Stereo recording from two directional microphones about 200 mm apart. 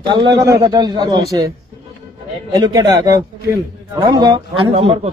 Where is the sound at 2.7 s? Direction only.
20° right (ahead or behind).